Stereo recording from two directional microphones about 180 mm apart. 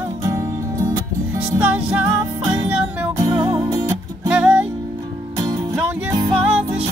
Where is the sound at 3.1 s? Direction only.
25° right (ahead or behind).